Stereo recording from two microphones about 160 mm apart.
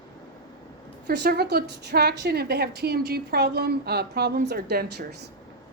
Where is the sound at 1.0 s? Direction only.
90° right.